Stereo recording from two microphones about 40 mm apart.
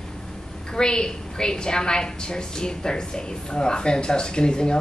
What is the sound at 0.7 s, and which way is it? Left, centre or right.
A woman's voice, centre.